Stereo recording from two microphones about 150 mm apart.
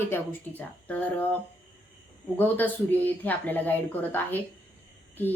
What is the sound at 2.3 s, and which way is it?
A woman's voice, 10° left (ahead or behind).